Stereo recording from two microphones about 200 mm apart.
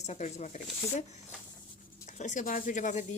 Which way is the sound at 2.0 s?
40° left (ahead or behind).